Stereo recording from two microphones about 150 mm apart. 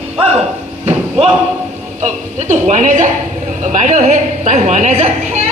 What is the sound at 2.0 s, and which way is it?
A woman's voice, 50° right (ahead or behind).